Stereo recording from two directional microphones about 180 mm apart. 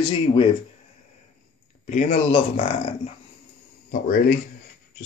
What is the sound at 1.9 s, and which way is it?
Speech, 40° left (ahead or behind).